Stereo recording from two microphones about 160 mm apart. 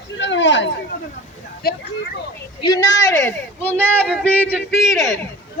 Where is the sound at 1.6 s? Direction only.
75° left (ahead or behind).